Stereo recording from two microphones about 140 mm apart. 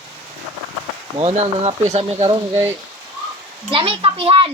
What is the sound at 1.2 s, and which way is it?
Speech, 50° right (ahead or behind).